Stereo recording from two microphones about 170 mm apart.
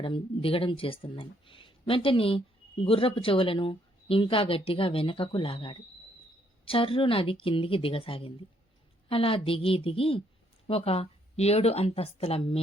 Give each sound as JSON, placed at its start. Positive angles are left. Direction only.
{"t": 0.0, "sound": "speech", "side_deg": 30}